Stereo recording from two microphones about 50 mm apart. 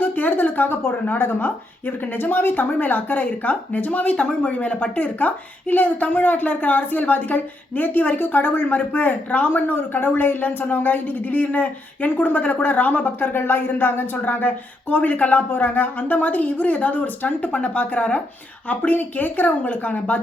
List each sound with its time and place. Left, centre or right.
0.0 s speech: left